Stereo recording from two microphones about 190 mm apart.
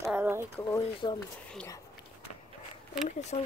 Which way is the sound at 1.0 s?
20° left (ahead or behind).